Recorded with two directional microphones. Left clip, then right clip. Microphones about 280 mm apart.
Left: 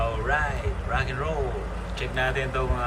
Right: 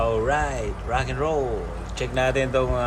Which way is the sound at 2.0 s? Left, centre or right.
Centre.